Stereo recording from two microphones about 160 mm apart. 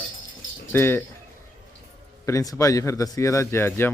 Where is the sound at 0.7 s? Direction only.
15° left (ahead or behind).